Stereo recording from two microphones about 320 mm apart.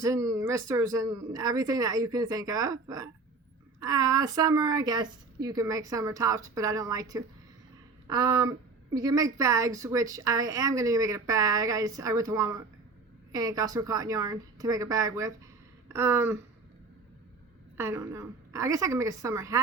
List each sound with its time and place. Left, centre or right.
0.0 s a woman's voice: centre
17.7 s a woman's voice: centre